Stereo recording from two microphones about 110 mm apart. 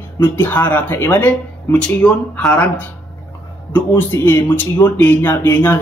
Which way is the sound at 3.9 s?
20° left (ahead or behind).